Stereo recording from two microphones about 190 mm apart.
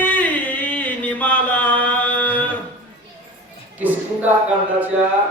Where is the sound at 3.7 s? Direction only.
10° right (ahead or behind).